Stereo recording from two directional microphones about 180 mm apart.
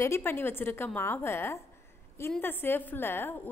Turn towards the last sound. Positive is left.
turn(degrees=10)  # may be behind; listen again after turning